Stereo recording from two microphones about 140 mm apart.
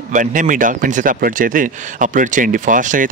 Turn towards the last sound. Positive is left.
turn(degrees=-70)  # may be behind; listen again after turning